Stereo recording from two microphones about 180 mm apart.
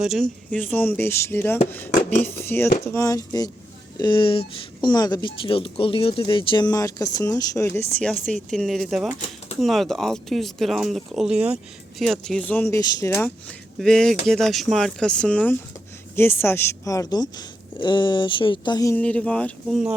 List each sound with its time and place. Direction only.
0.0 s speech: centre (ahead or behind)
8.3 s speech: centre (ahead or behind)
12.7 s speech: 15° left (ahead or behind)
13.7 s speech: 5° left (ahead or behind); by 18.9 s 20° left (ahead or behind)
18.9 s speech: 5° left (ahead or behind)